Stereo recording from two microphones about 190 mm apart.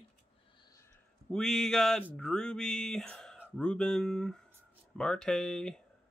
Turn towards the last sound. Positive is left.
turn(degrees=5)  # may be behind; listen again after turning